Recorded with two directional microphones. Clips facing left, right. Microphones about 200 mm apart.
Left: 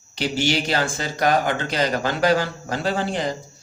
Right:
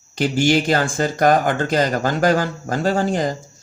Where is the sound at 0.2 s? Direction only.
50° right (ahead or behind).